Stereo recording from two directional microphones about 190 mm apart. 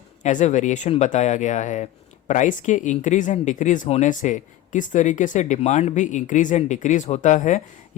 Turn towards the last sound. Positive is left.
turn(degrees=40)  # may be behind; listen again after turning